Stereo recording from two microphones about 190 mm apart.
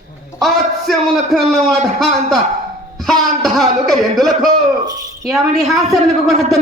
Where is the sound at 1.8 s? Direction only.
Centre (ahead or behind).